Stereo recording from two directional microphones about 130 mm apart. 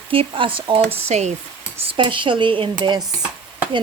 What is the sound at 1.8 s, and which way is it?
Speech, 40° right (ahead or behind).